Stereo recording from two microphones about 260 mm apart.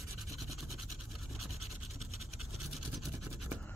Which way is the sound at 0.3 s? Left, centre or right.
Centre.